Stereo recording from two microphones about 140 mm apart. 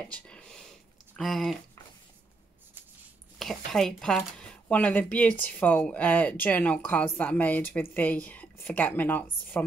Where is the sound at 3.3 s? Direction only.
Centre (ahead or behind).